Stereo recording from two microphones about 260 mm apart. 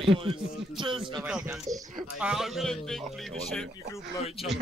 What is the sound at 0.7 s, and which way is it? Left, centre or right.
Speech, centre.